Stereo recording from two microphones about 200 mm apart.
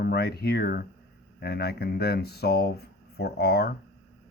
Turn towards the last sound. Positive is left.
turn(degrees=50)  # may be behind; listen again after turning